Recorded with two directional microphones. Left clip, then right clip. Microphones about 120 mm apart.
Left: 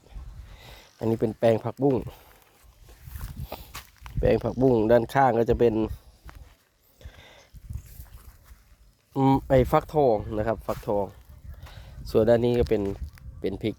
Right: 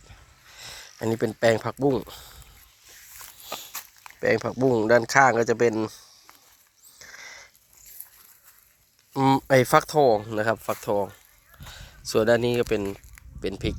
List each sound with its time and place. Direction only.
0.5 s a sound: 15° left (ahead or behind)
1.0 s speech: 10° left (ahead or behind)
3.4 s walk: 10° left (ahead or behind)
3.7 s walk: 10° right (ahead or behind)
4.2 s speech: 25° left (ahead or behind)
7.0 s a sound: 20° left (ahead or behind)
9.1 s speech: centre (ahead or behind)
11.7 s speech: 15° left (ahead or behind)
12.8 s a sound: centre (ahead or behind)
13.4 s speech: 15° left (ahead or behind)